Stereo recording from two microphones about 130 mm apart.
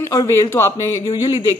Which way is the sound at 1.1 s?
40° left (ahead or behind).